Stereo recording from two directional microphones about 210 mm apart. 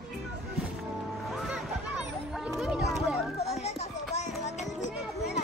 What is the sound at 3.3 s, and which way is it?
Music, 30° left (ahead or behind).